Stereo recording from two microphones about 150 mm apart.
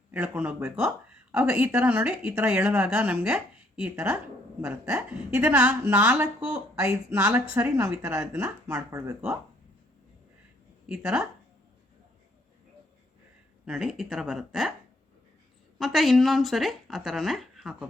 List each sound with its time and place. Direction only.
0.1 s speech: 10° right (ahead or behind)
10.8 s speech: 5° right (ahead or behind)
13.7 s speech: 5° right (ahead or behind)
15.8 s speech: centre (ahead or behind)